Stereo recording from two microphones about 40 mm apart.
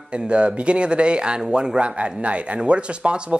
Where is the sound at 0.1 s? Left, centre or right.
Right.